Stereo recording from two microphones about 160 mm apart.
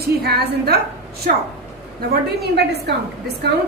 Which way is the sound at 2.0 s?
90° right.